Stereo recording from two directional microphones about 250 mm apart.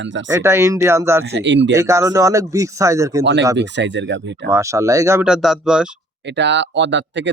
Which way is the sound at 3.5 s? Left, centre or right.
Right.